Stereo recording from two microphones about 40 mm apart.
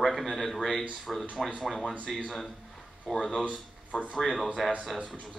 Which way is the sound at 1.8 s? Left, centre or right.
Left.